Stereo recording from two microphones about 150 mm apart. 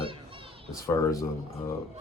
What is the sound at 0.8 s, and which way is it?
Speech, 20° left (ahead or behind).